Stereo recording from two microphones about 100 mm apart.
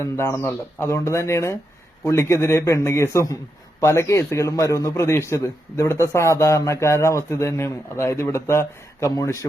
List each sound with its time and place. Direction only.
0.0 s a man's voice: 25° left (ahead or behind)